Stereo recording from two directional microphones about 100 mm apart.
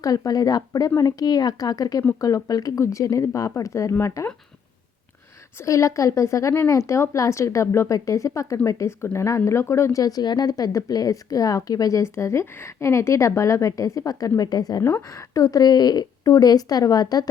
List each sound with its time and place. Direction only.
0.0 s a woman's voice: 35° left (ahead or behind)
5.6 s a woman's voice: 35° left (ahead or behind)